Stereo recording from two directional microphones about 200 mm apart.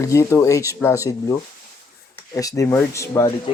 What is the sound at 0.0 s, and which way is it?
Speech, 15° left (ahead or behind).